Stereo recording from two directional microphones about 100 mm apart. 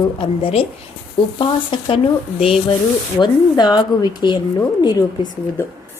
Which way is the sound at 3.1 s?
50° left (ahead or behind).